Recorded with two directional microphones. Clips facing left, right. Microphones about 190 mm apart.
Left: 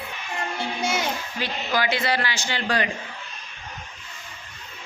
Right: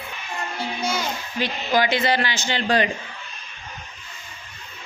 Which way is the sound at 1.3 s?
20° right (ahead or behind).